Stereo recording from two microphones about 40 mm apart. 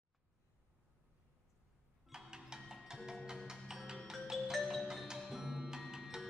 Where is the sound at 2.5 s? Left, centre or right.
Centre.